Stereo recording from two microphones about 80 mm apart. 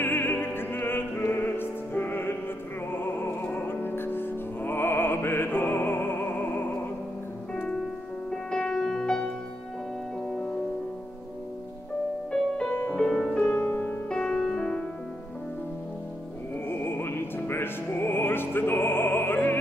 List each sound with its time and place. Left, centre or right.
0.0 s opera: left
1.3 s music: left
7.5 s music: centre
12.3 s music: centre
14.0 s music: centre
16.6 s music: left